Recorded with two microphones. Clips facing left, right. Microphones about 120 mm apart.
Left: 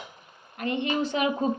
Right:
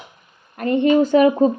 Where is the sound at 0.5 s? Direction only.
45° right (ahead or behind).